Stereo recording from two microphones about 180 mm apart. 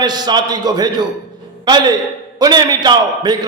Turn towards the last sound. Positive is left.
turn(degrees=-25)  # may be behind; listen again after turning